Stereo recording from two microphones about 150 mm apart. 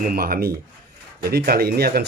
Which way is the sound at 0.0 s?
80° right.